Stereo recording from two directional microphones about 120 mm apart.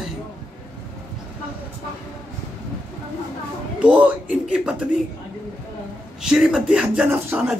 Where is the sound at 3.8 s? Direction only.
10° right (ahead or behind).